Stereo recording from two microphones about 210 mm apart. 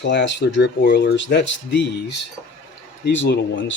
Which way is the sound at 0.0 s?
55° left (ahead or behind).